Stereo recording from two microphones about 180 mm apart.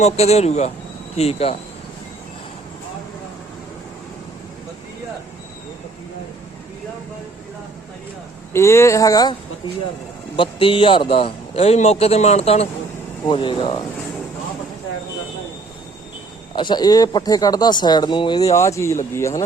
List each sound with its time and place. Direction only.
0.0 s a man's voice: 35° left (ahead or behind)
8.5 s speech: 15° left (ahead or behind)
10.3 s a man's voice: 30° left (ahead or behind)
16.6 s speech: 25° left (ahead or behind)